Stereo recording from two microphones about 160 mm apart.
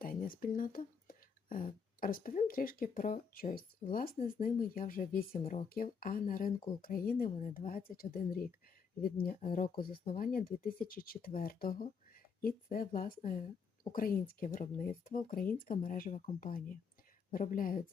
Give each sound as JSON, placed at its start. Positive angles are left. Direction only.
{"t": 0.0, "sound": "a sound", "side_deg": 60}
{"t": 2.5, "sound": "speech", "side_deg": 65}
{"t": 7.3, "sound": "speech", "side_deg": 45}
{"t": 7.7, "sound": "speech", "side_deg": 65}